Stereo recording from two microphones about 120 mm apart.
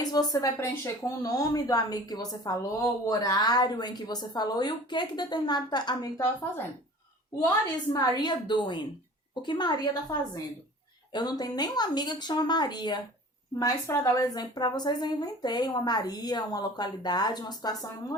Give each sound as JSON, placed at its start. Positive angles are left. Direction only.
{"t": 0.0, "sound": "a woman's voice", "side_deg": 35}
{"t": 7.9, "sound": "a woman's voice", "side_deg": 35}
{"t": 10.1, "sound": "a woman's voice", "side_deg": 25}